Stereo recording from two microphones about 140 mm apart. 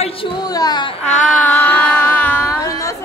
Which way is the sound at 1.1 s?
60° left (ahead or behind).